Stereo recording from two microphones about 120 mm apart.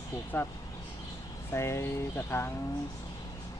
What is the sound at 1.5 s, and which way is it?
Speech, 25° left (ahead or behind).